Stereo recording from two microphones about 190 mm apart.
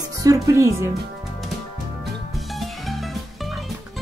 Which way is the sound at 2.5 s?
Centre (ahead or behind).